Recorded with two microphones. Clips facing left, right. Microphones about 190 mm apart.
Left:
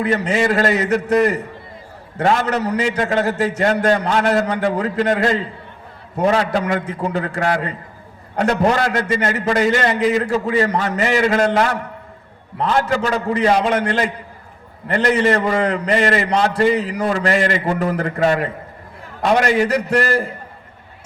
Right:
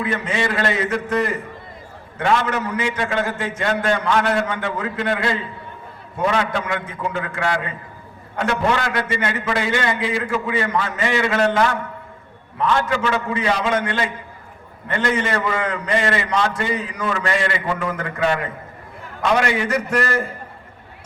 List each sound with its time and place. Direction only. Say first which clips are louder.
0.0 s a man's voice: left 5 dB; 40° left (ahead or behind)